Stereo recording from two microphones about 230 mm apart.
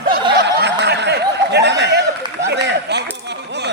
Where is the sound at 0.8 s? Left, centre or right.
Right.